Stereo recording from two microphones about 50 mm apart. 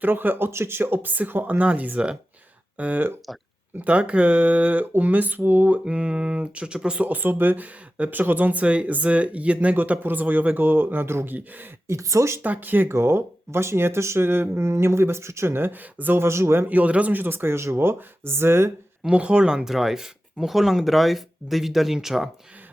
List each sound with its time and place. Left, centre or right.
0.0 s speech: right
5.8 s speech: centre
7.1 s speech: right
8.6 s speech: right
11.3 s speech: right
11.9 s speech: right
12.4 s speech: right
12.9 s speech: right
14.6 s speech: right
16.2 s speech: right
16.6 s speech: right
17.2 s speech: right
19.1 s speech: right; by 22.3 s centre